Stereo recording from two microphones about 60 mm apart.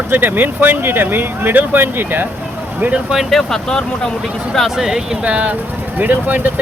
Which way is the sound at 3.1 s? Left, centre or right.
Centre.